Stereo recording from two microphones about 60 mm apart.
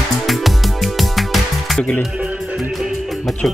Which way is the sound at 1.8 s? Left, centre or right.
Centre.